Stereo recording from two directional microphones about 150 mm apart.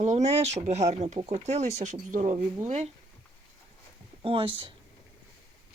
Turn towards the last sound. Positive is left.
turn(degrees=-35)  # may be behind; listen again after turning